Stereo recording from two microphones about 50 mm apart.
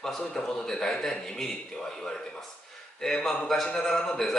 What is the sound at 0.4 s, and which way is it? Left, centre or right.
A man's voice, centre.